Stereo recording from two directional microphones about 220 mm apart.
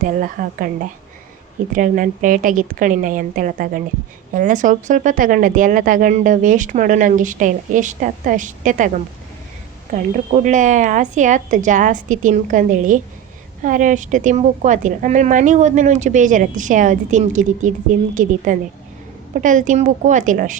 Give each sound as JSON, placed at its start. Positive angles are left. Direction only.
{"t": 0.0, "sound": "a woman's voice", "side_deg": -40}
{"t": 9.9, "sound": "a woman's voice", "side_deg": -35}